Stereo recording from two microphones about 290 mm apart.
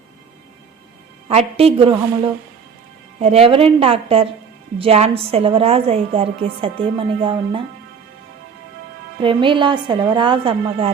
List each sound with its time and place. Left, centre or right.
1.3 s a woman's voice: right
9.2 s a woman's voice: centre